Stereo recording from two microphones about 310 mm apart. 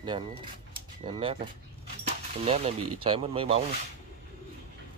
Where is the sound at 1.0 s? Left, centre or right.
Centre.